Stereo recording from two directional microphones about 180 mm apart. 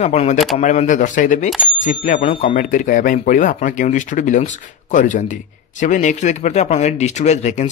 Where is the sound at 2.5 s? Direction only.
45° left (ahead or behind).